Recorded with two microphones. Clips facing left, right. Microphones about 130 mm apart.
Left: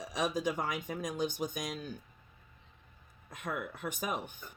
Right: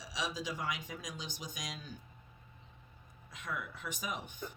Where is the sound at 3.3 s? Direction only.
50° left (ahead or behind).